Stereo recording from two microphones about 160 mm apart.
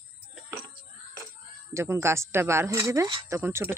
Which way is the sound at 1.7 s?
15° right (ahead or behind).